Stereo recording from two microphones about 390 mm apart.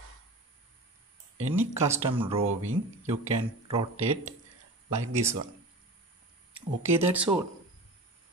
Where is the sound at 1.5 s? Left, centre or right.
Centre.